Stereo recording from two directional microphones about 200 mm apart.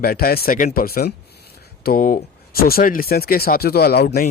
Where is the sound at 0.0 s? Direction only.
50° left (ahead or behind).